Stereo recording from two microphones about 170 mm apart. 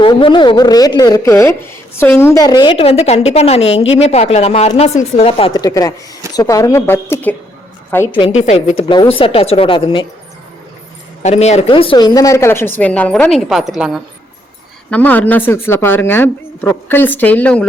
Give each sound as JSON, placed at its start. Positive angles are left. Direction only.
{"t": 0.0, "sound": "a woman's voice", "side_deg": 30}
{"t": 8.3, "sound": "speech", "side_deg": 40}
{"t": 8.9, "sound": "speech", "side_deg": 30}
{"t": 11.2, "sound": "speech", "side_deg": 40}
{"t": 14.8, "sound": "speech", "side_deg": 10}